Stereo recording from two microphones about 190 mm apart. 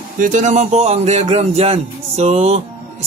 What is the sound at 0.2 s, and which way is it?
Speech, 40° right (ahead or behind).